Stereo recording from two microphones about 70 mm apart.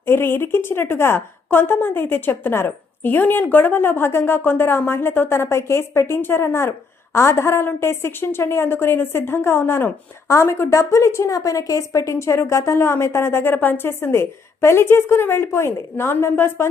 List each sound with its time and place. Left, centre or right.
0.0 s speech: left